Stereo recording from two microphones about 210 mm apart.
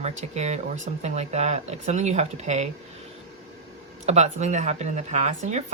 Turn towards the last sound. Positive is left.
turn(degrees=-30)  # may be behind; listen again after turning